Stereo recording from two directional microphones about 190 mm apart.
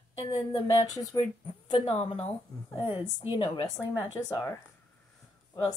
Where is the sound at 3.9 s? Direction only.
15° left (ahead or behind).